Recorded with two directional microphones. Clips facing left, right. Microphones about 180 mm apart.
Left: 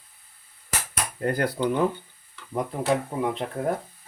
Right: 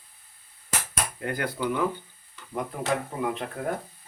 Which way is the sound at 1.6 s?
30° left (ahead or behind).